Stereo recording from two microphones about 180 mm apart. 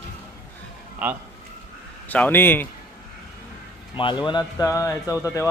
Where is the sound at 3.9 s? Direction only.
25° left (ahead or behind).